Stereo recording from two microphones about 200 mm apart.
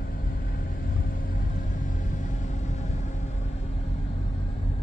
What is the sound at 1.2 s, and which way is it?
Vehicle, 40° left (ahead or behind).